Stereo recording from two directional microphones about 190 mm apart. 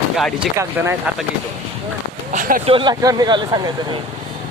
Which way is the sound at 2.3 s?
45° right (ahead or behind).